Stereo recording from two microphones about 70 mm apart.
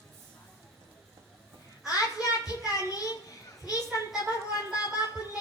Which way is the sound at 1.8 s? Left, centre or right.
Left.